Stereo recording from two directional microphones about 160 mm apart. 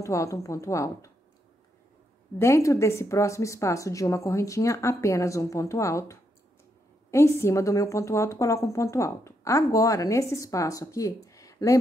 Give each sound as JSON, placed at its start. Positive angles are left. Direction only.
{"t": 0.0, "sound": "a woman's voice", "side_deg": 20}
{"t": 2.3, "sound": "a woman's voice", "side_deg": 20}